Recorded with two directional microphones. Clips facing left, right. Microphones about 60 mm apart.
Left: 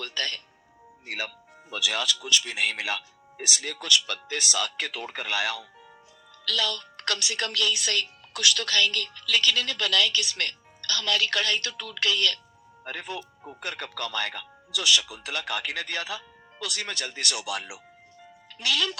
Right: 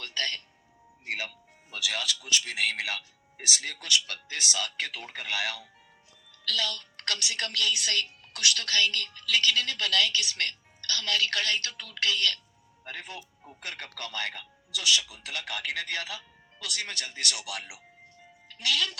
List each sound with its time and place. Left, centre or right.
0.0 s speech: left
1.7 s speech: left
13.1 s speech: left
13.7 s speech: left
18.6 s speech: left